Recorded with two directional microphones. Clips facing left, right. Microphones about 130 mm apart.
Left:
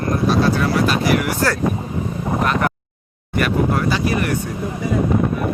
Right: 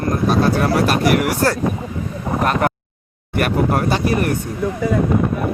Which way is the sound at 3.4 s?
50° right (ahead or behind).